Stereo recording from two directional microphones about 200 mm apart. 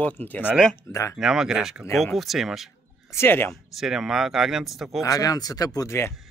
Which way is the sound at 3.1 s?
10° left (ahead or behind).